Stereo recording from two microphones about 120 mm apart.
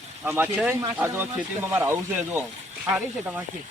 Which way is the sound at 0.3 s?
15° right (ahead or behind).